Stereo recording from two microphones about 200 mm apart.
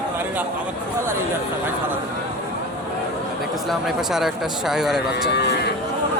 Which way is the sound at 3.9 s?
Centre (ahead or behind).